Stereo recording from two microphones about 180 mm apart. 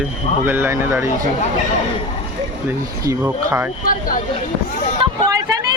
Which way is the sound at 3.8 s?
50° left (ahead or behind).